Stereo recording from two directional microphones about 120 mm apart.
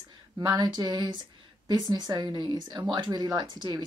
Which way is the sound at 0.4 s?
35° right (ahead or behind).